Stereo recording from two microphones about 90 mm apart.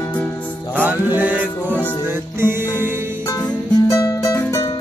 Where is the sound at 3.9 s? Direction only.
35° left (ahead or behind).